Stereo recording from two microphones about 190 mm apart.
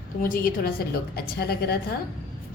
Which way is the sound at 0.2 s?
50° left (ahead or behind).